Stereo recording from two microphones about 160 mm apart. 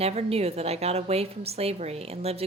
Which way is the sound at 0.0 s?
40° right (ahead or behind).